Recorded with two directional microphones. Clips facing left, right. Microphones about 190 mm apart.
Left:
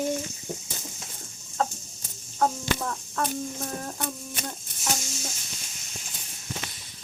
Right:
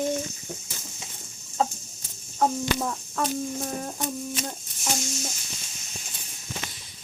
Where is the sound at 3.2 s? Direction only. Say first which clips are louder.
Right 1 dB; 5° right (ahead or behind).